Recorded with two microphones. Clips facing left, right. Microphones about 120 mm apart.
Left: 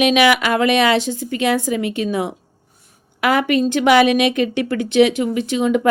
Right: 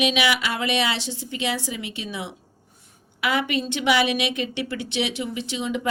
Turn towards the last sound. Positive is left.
turn(degrees=50)  # may be behind; listen again after turning